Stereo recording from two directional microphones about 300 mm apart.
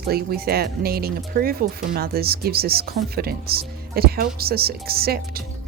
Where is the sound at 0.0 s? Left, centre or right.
Right.